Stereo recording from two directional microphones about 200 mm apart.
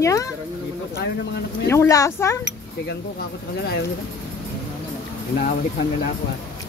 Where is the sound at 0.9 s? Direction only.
50° left (ahead or behind).